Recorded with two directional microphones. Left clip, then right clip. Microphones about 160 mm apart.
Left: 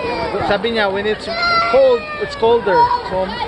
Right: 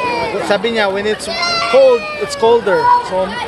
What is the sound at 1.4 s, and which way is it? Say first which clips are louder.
Baby cry: right 1 dB; 90° right.